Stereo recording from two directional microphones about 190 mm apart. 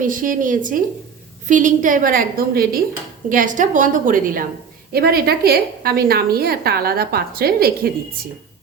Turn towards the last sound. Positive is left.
turn(degrees=-50)  # may be behind; listen again after turning